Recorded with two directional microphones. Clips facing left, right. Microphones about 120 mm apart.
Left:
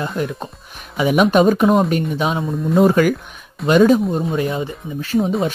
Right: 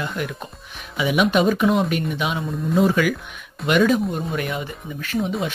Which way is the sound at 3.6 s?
35° left (ahead or behind).